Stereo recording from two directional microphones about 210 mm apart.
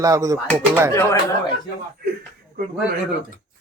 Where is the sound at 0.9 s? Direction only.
15° left (ahead or behind).